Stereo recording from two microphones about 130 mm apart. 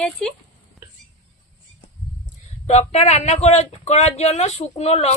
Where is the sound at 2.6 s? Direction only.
55° left (ahead or behind).